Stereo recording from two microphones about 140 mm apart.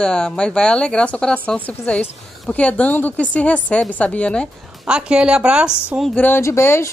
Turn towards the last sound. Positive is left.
turn(degrees=20)  # may be behind; listen again after turning